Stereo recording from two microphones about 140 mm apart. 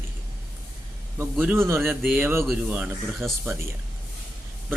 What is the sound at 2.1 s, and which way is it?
Speech, 15° right (ahead or behind).